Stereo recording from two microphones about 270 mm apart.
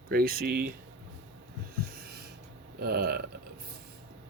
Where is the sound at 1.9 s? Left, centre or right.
Right.